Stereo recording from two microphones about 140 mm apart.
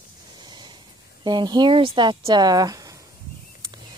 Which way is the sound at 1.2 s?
30° right (ahead or behind).